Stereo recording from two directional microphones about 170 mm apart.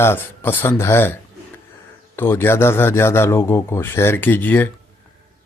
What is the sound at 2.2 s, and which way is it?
Speech, 15° left (ahead or behind).